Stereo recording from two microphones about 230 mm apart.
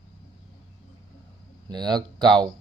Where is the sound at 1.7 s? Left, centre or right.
Centre.